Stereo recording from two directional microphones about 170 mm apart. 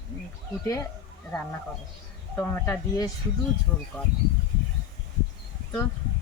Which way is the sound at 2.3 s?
15° left (ahead or behind).